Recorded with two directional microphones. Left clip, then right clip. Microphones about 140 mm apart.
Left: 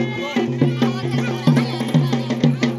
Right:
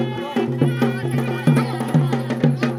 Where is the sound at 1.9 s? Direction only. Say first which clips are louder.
Left 1 dB; 20° right (ahead or behind).